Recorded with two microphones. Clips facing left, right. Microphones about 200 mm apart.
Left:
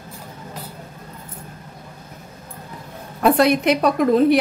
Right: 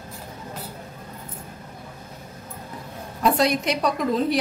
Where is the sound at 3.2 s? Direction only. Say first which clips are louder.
Left 5 dB; 60° left (ahead or behind).